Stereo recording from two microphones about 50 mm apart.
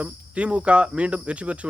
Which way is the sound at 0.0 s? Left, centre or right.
Right.